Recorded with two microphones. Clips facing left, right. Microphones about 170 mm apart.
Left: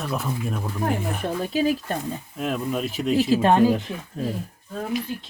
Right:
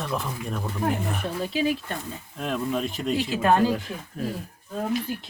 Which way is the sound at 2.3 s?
5° left (ahead or behind).